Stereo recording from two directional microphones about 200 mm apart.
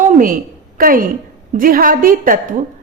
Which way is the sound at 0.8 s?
45° right (ahead or behind).